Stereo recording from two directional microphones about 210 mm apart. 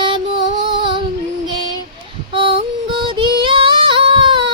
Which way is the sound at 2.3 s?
25° right (ahead or behind).